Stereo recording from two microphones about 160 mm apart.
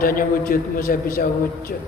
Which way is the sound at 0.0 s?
60° left (ahead or behind).